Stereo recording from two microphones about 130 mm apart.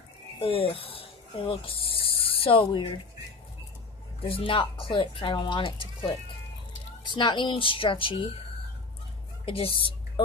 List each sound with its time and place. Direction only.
0.4 s speech: 45° left (ahead or behind)
4.2 s speech: 45° left (ahead or behind)
7.2 s speech: 35° left (ahead or behind)
9.5 s speech: 45° left (ahead or behind)